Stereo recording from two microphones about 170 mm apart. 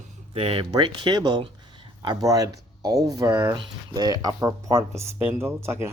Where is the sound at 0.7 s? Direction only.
25° right (ahead or behind).